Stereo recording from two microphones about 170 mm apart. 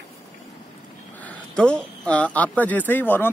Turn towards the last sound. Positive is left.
turn(degrees=10)  # may be behind; listen again after turning